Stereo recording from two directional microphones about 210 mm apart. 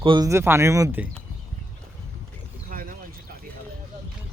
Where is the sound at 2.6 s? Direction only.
45° right (ahead or behind).